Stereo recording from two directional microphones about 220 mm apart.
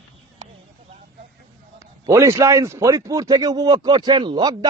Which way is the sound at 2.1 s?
15° right (ahead or behind).